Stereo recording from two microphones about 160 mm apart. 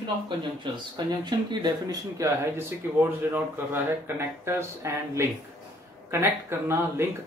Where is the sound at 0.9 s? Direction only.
25° right (ahead or behind).